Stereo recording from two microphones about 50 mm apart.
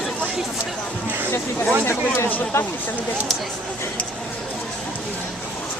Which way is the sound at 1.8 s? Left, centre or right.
Left.